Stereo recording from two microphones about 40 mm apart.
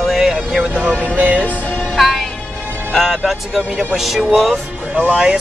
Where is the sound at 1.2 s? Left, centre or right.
Right.